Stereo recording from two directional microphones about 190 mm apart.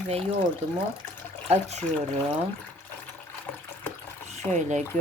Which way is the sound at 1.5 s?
35° right (ahead or behind).